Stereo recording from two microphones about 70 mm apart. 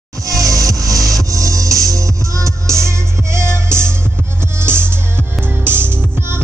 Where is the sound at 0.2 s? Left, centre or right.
Right.